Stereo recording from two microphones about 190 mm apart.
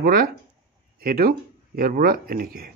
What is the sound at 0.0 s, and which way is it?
A man's voice, 50° right (ahead or behind).